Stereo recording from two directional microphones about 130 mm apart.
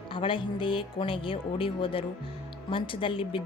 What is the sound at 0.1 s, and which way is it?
A woman's voice, 40° left (ahead or behind).